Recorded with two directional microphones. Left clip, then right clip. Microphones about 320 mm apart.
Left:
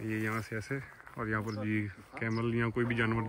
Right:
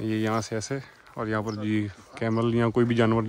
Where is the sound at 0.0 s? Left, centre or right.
Centre.